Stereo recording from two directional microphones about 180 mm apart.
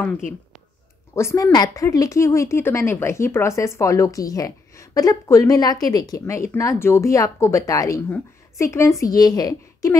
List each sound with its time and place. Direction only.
1.1 s a woman's voice: 15° left (ahead or behind)